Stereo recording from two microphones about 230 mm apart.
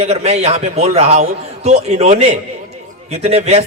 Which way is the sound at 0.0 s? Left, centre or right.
Right.